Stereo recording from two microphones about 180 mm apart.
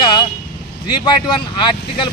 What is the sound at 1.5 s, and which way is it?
Speech, 25° left (ahead or behind).